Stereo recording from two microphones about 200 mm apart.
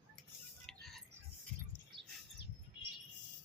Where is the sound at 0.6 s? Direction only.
Centre (ahead or behind).